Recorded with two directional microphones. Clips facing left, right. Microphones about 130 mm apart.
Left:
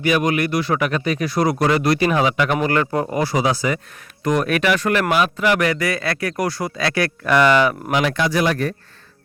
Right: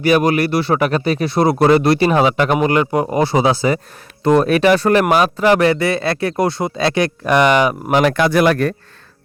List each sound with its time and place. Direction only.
0.0 s speech: 35° right (ahead or behind)
2.5 s speech: 20° right (ahead or behind)
7.9 s speech: 50° right (ahead or behind)